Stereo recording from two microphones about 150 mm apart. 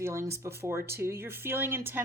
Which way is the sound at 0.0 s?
20° right (ahead or behind).